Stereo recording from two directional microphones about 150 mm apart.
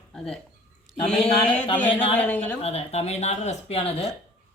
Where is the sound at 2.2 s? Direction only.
10° left (ahead or behind).